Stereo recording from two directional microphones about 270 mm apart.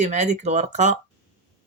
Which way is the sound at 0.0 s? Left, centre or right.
Right.